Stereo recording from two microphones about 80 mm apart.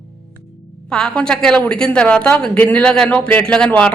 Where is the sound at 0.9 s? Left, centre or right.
Centre.